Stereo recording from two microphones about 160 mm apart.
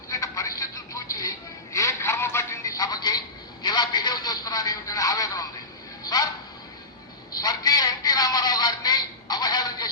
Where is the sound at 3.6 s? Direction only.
25° left (ahead or behind).